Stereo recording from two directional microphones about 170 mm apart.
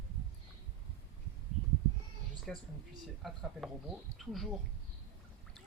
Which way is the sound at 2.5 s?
Centre (ahead or behind).